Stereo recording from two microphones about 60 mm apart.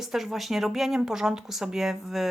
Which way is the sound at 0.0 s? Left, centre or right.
Centre.